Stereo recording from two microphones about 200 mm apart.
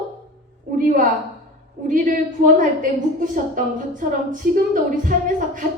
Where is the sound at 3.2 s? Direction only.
40° right (ahead or behind).